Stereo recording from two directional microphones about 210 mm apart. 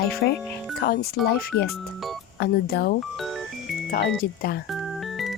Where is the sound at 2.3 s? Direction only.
50° left (ahead or behind).